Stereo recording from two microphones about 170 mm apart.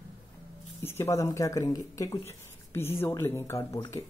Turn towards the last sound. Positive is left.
turn(degrees=20)  # may be behind; listen again after turning